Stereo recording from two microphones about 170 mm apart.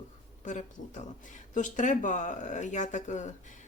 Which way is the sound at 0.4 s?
45° left (ahead or behind).